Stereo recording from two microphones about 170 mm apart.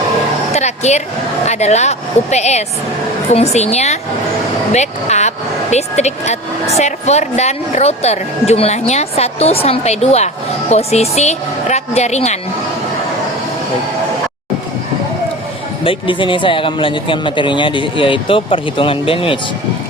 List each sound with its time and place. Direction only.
0.5 s a woman's voice: 40° left (ahead or behind)
15.8 s speech: 30° left (ahead or behind)